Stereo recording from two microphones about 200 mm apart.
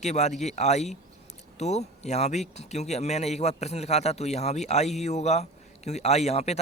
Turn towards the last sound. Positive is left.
turn(degrees=30)  # may be behind; listen again after turning